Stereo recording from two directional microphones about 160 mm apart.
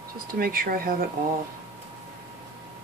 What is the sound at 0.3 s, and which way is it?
Speech, 65° right (ahead or behind).